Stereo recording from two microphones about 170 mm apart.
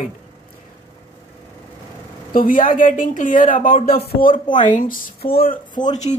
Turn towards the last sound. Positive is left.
turn(degrees=40)  # may be behind; listen again after turning